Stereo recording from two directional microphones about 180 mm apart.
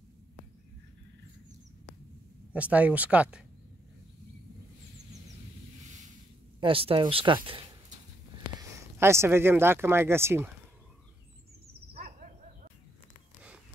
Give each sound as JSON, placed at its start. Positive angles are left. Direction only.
{"t": 2.5, "sound": "speech", "side_deg": -10}
{"t": 6.6, "sound": "speech", "side_deg": -30}
{"t": 8.5, "sound": "speech", "side_deg": -15}
{"t": 11.9, "sound": "owl", "side_deg": -50}